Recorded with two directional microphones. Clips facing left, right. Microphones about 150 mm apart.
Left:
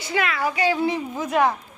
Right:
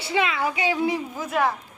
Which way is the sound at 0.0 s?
20° right (ahead or behind).